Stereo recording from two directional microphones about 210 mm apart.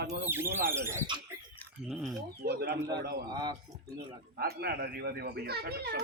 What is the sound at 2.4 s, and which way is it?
Speech, 50° right (ahead or behind).